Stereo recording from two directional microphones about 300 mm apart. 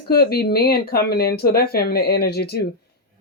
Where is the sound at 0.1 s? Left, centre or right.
Left.